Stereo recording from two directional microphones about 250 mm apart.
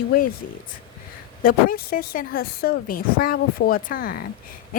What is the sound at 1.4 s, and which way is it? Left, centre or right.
Speech, left.